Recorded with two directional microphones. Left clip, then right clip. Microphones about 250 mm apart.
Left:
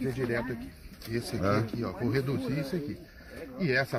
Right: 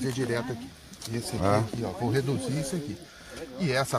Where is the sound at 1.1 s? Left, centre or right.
Right.